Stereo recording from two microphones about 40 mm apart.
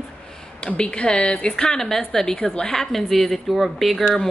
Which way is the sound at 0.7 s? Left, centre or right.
Left.